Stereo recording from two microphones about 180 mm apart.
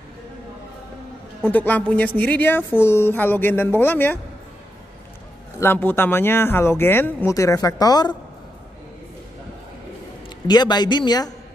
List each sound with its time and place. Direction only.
1.4 s a woman's voice: 10° left (ahead or behind)
5.6 s a woman's voice: 10° left (ahead or behind)
10.4 s a man's voice: 25° left (ahead or behind)